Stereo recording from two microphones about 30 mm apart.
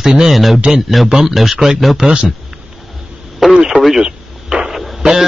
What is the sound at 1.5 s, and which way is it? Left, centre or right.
Speech, centre.